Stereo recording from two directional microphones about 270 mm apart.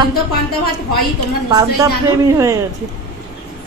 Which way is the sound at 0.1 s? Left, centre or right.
Left.